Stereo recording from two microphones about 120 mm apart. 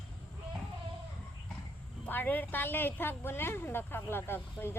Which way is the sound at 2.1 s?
15° left (ahead or behind).